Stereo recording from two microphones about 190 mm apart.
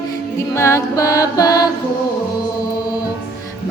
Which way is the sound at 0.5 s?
15° left (ahead or behind).